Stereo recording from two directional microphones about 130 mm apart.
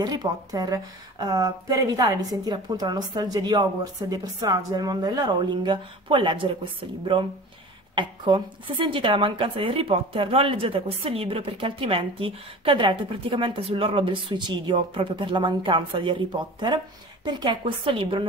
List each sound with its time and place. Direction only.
0.0 s a woman's voice: 30° right (ahead or behind)